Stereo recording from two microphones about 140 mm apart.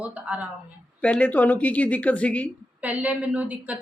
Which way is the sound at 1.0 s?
10° left (ahead or behind).